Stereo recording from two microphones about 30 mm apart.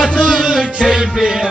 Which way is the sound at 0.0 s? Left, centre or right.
Left.